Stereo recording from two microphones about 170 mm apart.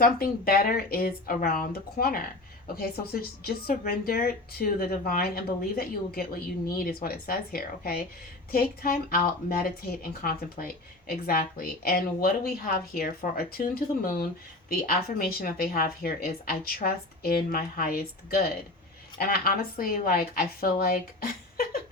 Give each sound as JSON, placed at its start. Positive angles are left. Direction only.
{"t": 0.0, "sound": "speech", "side_deg": 60}